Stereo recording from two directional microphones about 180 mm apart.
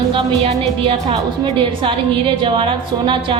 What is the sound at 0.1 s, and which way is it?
A woman's voice, 30° right (ahead or behind).